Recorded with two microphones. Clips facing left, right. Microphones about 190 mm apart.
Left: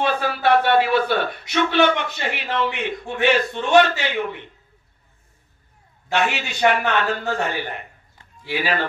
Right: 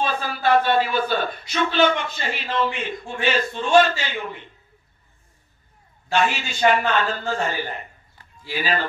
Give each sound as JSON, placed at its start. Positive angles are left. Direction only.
{"t": 0.0, "sound": "a man's voice", "side_deg": 70}
{"t": 6.1, "sound": "a man's voice", "side_deg": 65}